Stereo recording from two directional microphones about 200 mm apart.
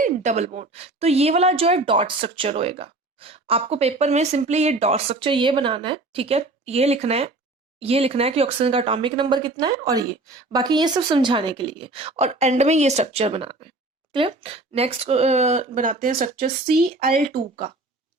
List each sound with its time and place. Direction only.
0.0 s a woman's voice: 40° right (ahead or behind)